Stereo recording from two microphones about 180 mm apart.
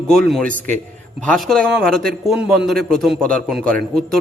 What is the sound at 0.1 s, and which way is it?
A man's voice, centre (ahead or behind).